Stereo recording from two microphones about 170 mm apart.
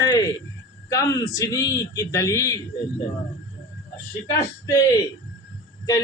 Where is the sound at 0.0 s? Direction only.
20° left (ahead or behind).